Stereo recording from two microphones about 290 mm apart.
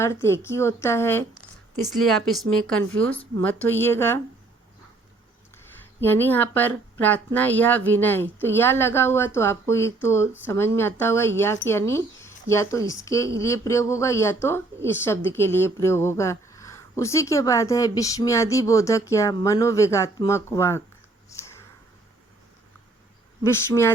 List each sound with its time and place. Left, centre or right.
0.0 s a woman's voice: centre
6.0 s a woman's voice: centre
21.2 s a sound: centre
23.4 s a woman's voice: centre